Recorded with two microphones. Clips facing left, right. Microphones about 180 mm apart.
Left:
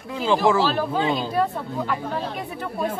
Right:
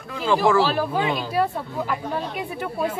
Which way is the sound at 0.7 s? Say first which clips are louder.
Even; 10° right (ahead or behind).